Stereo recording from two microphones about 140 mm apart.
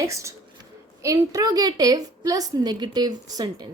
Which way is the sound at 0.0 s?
20° right (ahead or behind).